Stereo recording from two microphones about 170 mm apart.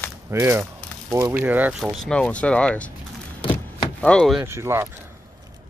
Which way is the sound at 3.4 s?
30° left (ahead or behind).